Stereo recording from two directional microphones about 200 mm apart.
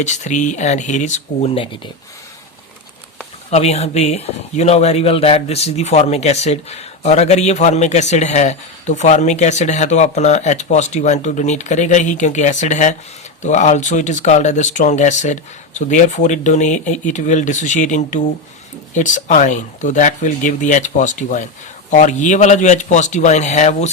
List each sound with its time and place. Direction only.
0.0 s speech: 35° left (ahead or behind)
3.5 s speech: 35° left (ahead or behind)